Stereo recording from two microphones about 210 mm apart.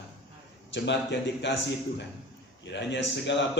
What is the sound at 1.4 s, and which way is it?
Speech, 55° left (ahead or behind).